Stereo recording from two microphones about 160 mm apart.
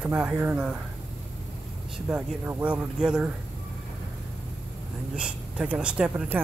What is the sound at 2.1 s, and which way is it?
Speech, 10° right (ahead or behind).